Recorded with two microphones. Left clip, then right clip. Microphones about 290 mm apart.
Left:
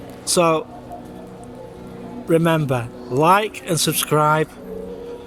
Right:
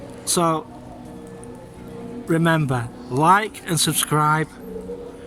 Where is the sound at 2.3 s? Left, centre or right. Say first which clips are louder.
Left 3 dB; centre.